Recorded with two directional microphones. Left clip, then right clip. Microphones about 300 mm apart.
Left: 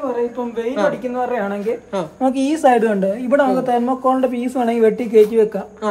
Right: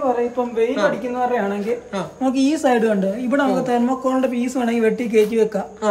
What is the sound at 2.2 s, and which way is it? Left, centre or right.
Speech, left.